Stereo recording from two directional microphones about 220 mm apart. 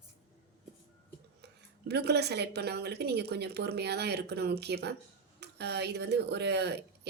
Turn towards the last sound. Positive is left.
turn(degrees=-50)  # may be behind; listen again after turning